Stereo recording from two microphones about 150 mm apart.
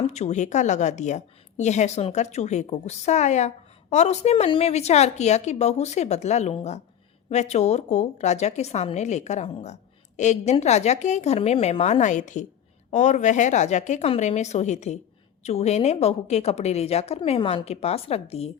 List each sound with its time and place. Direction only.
0.1 s a woman's voice: 50° left (ahead or behind)